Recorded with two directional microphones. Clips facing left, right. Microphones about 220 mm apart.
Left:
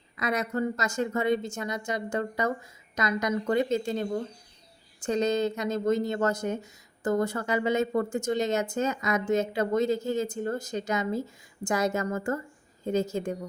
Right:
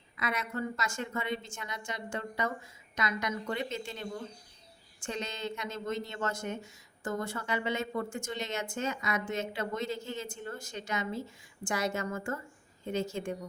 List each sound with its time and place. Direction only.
0.2 s speech: 40° left (ahead or behind)